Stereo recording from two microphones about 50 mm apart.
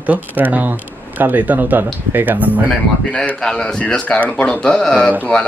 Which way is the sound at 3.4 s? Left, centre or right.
Centre.